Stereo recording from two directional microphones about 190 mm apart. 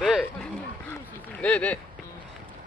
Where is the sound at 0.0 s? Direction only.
Centre (ahead or behind).